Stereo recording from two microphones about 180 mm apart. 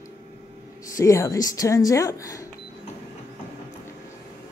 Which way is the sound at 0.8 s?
15° left (ahead or behind).